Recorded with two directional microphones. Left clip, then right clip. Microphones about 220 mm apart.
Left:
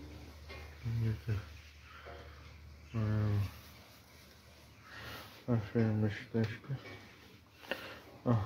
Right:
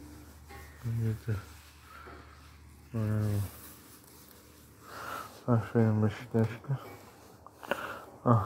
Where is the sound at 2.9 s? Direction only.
10° right (ahead or behind).